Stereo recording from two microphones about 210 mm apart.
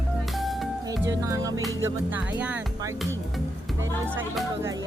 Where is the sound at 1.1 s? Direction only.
15° right (ahead or behind).